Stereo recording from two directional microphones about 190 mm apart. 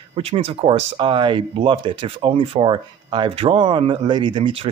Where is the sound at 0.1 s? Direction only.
30° right (ahead or behind).